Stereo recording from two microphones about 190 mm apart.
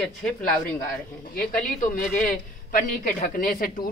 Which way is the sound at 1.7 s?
45° left (ahead or behind).